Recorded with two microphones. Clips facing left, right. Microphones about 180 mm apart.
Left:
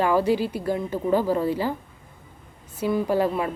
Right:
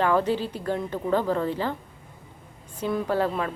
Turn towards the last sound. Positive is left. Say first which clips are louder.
# left 3 dB
turn(degrees=15)  # may be behind; listen again after turning